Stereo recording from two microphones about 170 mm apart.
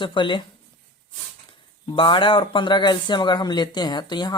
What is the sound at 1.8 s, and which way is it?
Speech, 30° left (ahead or behind).